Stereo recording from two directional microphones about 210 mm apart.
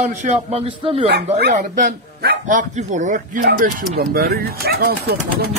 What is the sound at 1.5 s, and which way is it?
A man's voice, 40° right (ahead or behind).